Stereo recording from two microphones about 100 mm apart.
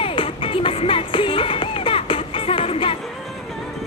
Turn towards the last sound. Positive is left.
turn(degrees=70)  # may be behind; listen again after turning